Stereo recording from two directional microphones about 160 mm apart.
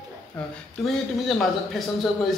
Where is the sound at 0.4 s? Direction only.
5° left (ahead or behind).